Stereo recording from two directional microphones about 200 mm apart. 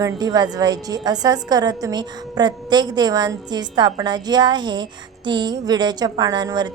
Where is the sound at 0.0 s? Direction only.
20° right (ahead or behind).